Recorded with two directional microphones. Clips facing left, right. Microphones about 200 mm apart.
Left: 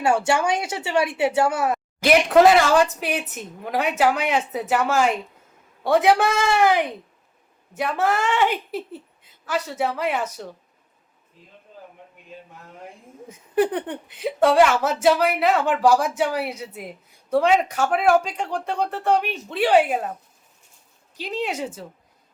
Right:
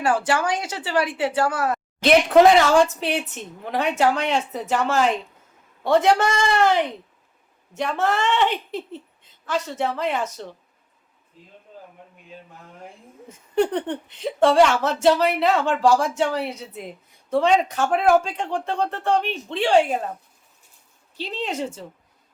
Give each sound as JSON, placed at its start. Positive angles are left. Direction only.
{"t": 0.0, "sound": "a woman's voice", "side_deg": 25}
{"t": 2.0, "sound": "speech", "side_deg": 0}
{"t": 3.0, "sound": "speech", "side_deg": 10}
{"t": 13.2, "sound": "speech", "side_deg": 5}
{"t": 18.9, "sound": "speech", "side_deg": 15}
{"t": 21.2, "sound": "speech", "side_deg": 10}